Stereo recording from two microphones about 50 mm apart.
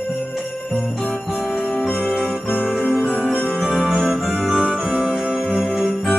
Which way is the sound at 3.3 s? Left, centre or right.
Left.